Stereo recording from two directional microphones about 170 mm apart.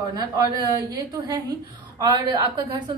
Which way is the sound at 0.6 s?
20° right (ahead or behind).